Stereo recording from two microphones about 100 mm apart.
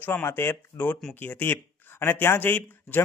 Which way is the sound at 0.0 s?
20° left (ahead or behind).